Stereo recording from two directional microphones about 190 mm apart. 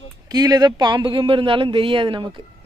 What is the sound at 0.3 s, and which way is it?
Speech, 20° right (ahead or behind).